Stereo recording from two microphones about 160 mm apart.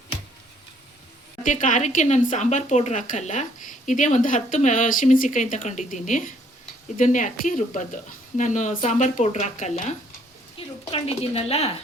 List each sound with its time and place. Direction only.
1.5 s speech: 55° left (ahead or behind)
10.6 s a sound: 35° left (ahead or behind)
10.9 s speech: 40° left (ahead or behind)